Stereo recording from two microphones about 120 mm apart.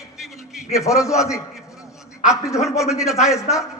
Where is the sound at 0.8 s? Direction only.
25° left (ahead or behind).